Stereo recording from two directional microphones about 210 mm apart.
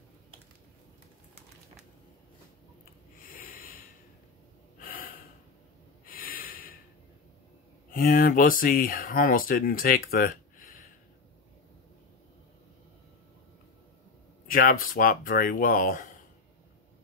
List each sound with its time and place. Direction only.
3.2 s snort: 40° left (ahead or behind)
4.7 s gasp: 40° left (ahead or behind)
6.0 s snort: 45° left (ahead or behind)
7.9 s speech: 40° left (ahead or behind)
14.5 s speech: 40° left (ahead or behind)